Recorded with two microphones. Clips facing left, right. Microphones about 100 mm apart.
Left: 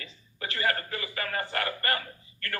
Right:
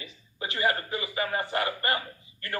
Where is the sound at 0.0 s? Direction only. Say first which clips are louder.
Right 2 dB; 15° right (ahead or behind).